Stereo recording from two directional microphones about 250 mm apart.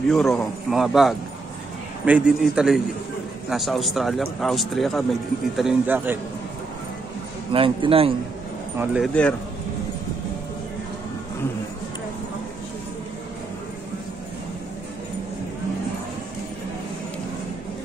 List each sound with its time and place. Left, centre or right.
0.1 s speech: centre
7.5 s a man's voice: right
8.7 s speech: centre